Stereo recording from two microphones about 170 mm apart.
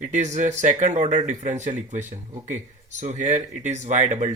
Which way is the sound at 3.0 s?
45° right (ahead or behind).